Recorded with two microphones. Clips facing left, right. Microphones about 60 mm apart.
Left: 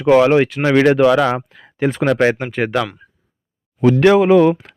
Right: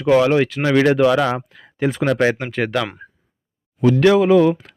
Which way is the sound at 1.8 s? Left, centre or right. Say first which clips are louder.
Left 2 dB; left.